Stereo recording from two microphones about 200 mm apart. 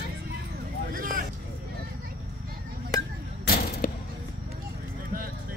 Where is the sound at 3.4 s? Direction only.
50° left (ahead or behind).